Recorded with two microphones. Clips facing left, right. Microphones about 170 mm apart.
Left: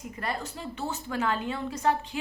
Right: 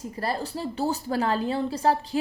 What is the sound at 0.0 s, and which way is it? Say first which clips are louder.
A woman's voice: right 5 dB; 35° right (ahead or behind).